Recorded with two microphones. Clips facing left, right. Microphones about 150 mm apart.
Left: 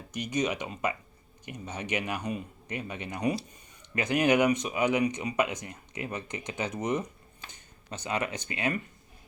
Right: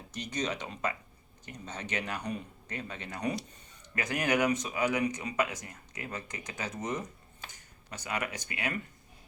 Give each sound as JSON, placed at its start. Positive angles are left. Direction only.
{"t": 0.1, "sound": "speech", "side_deg": 10}